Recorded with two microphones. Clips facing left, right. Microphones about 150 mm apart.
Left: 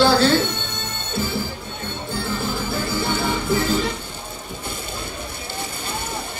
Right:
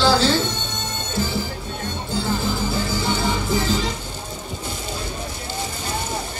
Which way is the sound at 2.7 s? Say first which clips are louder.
Even; 55° left (ahead or behind).